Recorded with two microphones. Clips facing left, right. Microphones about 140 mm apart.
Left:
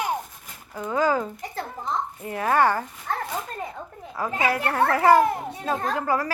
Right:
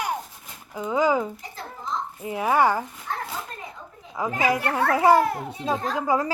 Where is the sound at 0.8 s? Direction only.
15° right (ahead or behind).